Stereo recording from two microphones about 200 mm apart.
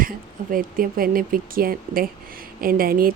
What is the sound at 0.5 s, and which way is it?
Speech, 45° right (ahead or behind).